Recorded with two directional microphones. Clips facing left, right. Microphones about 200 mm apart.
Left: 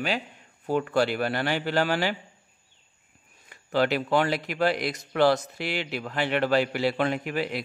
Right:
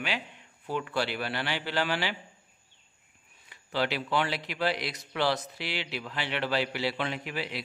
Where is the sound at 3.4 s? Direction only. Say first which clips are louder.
Left 6 dB; 50° left (ahead or behind).